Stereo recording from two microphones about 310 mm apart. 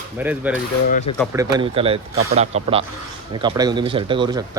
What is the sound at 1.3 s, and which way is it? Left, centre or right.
Speech, centre.